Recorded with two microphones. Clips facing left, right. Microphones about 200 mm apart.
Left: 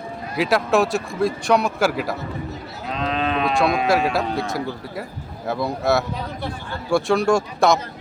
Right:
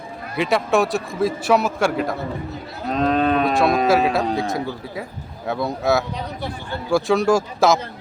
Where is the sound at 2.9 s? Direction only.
45° right (ahead or behind).